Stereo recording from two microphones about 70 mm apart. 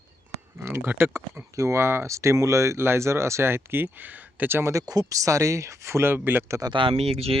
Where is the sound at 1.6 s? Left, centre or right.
Right.